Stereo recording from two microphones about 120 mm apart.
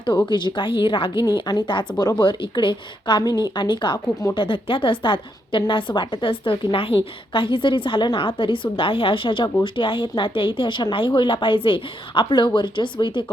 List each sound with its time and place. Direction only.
0.3 s a woman's voice: 40° left (ahead or behind)